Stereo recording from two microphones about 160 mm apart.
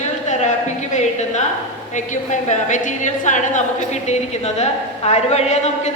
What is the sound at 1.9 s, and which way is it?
A woman's voice, 50° left (ahead or behind).